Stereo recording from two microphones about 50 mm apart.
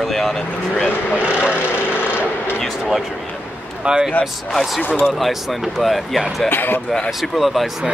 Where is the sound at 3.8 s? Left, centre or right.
Centre.